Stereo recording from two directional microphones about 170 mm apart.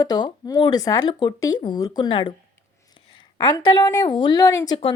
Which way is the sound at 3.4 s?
25° left (ahead or behind).